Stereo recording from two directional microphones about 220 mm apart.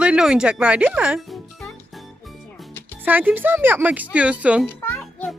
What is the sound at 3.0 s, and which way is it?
Speech, 10° right (ahead or behind).